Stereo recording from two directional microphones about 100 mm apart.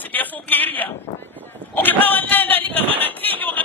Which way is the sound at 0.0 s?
15° left (ahead or behind).